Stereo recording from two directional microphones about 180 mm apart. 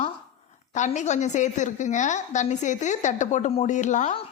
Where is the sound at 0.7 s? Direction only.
40° left (ahead or behind).